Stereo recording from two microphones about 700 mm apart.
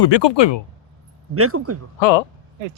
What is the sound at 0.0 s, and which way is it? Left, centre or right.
Speech, left.